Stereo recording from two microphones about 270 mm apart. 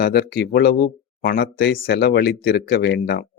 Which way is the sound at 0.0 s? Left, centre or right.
Left.